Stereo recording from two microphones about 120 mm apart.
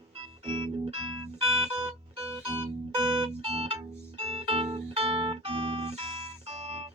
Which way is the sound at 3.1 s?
50° right (ahead or behind).